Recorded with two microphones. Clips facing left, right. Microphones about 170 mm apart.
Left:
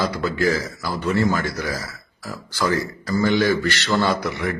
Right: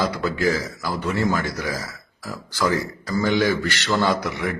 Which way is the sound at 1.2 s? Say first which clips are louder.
Left 2 dB; centre (ahead or behind).